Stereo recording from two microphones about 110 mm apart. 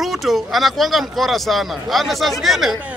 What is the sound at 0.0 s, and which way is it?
Speech, centre (ahead or behind).